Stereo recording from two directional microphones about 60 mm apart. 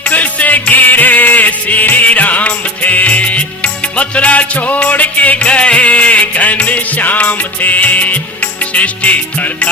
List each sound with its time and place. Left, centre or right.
0.0 s music: left